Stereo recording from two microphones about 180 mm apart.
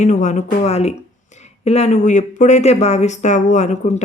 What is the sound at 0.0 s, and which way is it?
Speech, 40° left (ahead or behind).